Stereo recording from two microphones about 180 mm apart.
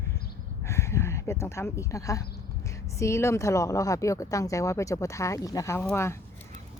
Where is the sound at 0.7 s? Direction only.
15° left (ahead or behind).